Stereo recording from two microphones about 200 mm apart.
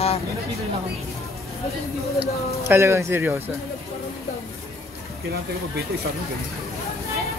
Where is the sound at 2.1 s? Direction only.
15° right (ahead or behind).